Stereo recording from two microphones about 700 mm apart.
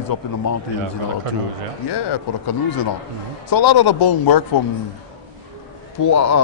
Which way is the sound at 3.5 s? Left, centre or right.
Left.